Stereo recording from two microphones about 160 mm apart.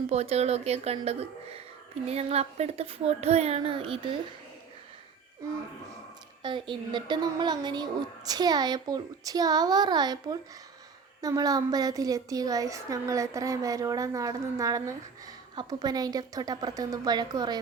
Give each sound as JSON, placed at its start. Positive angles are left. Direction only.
{"t": 0.1, "sound": "speech", "side_deg": -40}
{"t": 5.4, "sound": "a woman's voice", "side_deg": -20}